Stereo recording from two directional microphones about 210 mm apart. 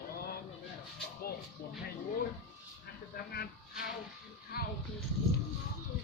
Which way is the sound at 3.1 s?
45° left (ahead or behind).